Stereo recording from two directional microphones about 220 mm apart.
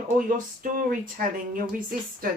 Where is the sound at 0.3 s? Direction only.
35° right (ahead or behind).